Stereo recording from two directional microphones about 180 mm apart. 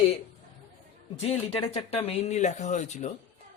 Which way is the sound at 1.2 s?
35° left (ahead or behind).